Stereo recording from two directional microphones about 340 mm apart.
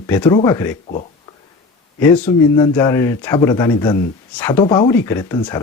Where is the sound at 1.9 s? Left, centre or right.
Centre.